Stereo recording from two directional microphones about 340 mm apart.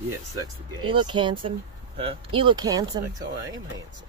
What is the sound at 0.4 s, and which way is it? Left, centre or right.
Speech, centre.